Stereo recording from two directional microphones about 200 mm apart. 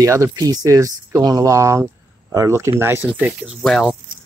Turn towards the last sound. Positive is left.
turn(degrees=0)  # may be behind; listen again after turning